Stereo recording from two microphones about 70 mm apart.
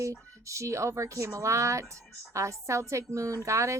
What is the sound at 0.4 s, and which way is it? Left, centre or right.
A woman's voice, right.